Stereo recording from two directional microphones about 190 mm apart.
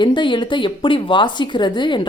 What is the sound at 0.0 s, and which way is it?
A woman's voice, 25° left (ahead or behind).